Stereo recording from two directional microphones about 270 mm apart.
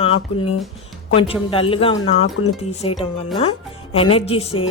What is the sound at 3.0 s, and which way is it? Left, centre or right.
Speech, left.